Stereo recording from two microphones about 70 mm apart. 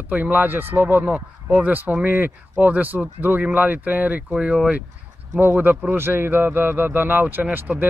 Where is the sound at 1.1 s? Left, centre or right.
Centre.